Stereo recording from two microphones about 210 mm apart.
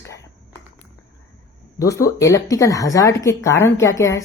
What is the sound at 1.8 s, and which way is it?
Speech, 15° left (ahead or behind).